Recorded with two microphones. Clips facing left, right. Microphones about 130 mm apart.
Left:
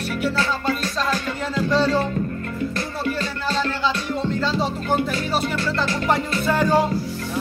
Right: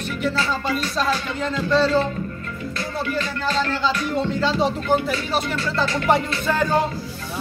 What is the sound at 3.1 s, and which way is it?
Music, 35° left (ahead or behind).